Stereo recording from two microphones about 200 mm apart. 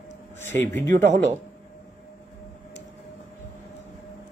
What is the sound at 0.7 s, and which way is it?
Speech, 40° right (ahead or behind).